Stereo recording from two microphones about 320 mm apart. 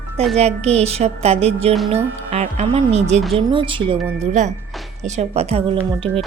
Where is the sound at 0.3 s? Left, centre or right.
Centre.